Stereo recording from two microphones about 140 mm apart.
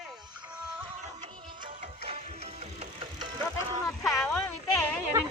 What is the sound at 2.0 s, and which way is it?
Music, 50° right (ahead or behind).